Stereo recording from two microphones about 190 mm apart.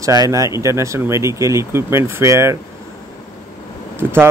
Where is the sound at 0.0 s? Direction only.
15° right (ahead or behind).